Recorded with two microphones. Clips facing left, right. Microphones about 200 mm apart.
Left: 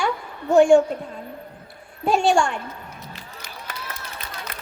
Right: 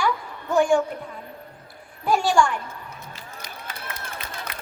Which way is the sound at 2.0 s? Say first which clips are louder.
Left 2 dB; 25° left (ahead or behind).